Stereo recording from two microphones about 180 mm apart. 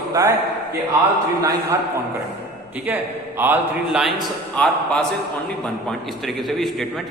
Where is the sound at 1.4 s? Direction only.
15° right (ahead or behind).